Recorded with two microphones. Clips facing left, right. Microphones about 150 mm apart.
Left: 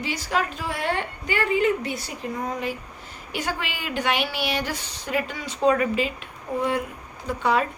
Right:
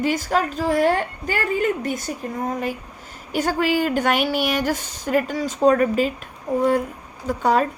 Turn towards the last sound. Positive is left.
turn(degrees=-40)  # may be behind; listen again after turning